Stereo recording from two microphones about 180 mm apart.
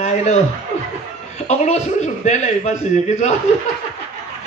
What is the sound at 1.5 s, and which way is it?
A man's voice, 40° left (ahead or behind).